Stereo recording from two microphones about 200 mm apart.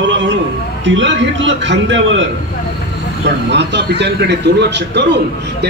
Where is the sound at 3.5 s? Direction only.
60° right (ahead or behind).